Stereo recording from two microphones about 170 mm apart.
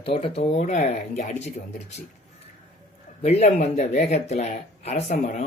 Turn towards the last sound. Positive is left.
turn(degrees=45)  # may be behind; listen again after turning